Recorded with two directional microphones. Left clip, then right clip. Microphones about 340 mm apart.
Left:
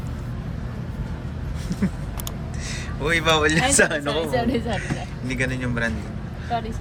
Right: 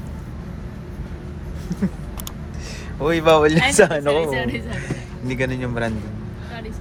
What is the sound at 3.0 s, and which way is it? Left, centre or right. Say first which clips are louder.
Speech: right 4 dB; centre.